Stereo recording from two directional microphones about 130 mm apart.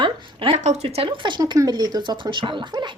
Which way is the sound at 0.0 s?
40° right (ahead or behind).